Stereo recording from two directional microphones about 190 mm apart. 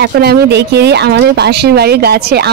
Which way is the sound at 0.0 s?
60° right (ahead or behind).